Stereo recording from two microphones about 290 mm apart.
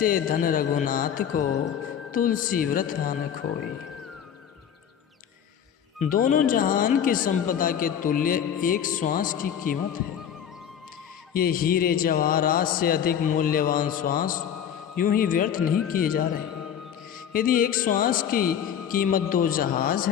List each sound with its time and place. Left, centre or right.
0.0 s speech: left
6.0 s speech: left
11.3 s speech: left
17.3 s speech: left